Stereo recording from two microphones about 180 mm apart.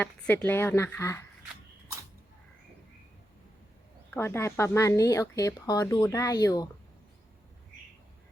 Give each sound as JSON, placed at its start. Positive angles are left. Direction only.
{"t": 0.0, "sound": "speech", "side_deg": 10}
{"t": 4.1, "sound": "speech", "side_deg": 15}